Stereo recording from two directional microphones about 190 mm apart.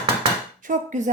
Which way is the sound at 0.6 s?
40° right (ahead or behind).